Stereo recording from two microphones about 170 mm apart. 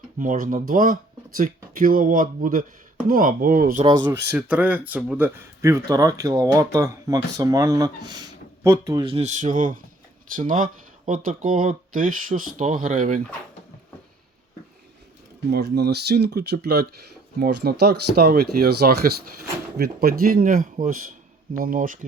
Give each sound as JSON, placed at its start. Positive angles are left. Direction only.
{"t": 0.2, "sound": "speech", "side_deg": -50}
{"t": 3.8, "sound": "speech", "side_deg": -25}
{"t": 4.1, "sound": "speech", "side_deg": -10}
{"t": 9.2, "sound": "speech", "side_deg": -45}
{"t": 15.4, "sound": "speech", "side_deg": -75}